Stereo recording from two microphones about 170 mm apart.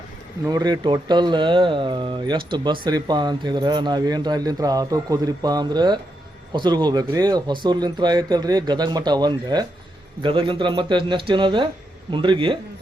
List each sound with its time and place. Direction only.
0.4 s speech: 20° right (ahead or behind)